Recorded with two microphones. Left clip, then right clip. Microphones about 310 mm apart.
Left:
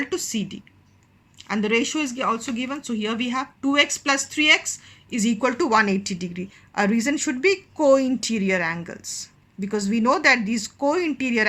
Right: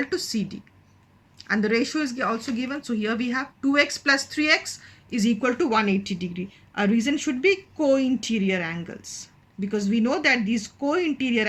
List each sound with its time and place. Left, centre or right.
0.0 s speech: centre